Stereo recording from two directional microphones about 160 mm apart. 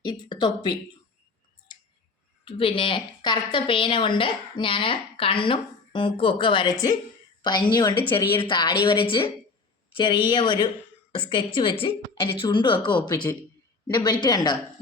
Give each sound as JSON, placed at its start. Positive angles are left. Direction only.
{"t": 0.0, "sound": "speech", "side_deg": 25}
{"t": 2.4, "sound": "a woman's voice", "side_deg": 35}